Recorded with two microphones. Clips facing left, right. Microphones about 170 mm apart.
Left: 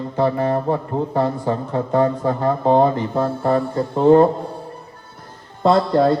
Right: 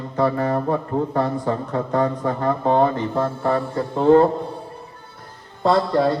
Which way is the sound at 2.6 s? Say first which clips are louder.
Left 3 dB; 15° left (ahead or behind).